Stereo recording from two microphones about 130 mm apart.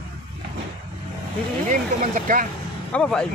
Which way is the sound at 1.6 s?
80° right.